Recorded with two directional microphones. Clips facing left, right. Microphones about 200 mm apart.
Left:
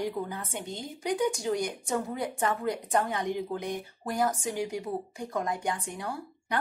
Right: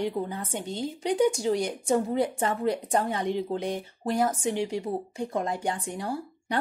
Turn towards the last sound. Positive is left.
turn(degrees=-30)  # may be behind; listen again after turning